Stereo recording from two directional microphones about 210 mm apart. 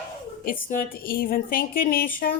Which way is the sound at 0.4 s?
45° left (ahead or behind).